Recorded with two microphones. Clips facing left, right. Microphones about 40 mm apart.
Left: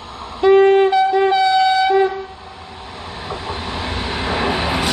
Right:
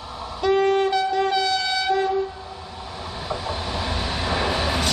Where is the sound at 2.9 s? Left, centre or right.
Centre.